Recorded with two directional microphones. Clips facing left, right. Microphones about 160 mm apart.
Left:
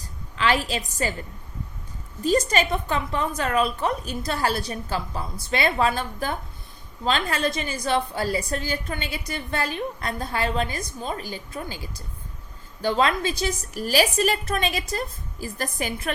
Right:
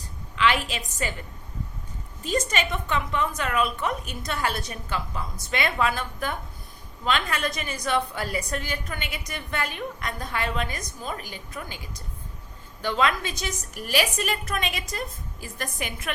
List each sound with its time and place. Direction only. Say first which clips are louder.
0.3 s a woman's voice: left 1 dB; 35° left (ahead or behind)
2.2 s a woman's voice: left 5 dB; 35° left (ahead or behind)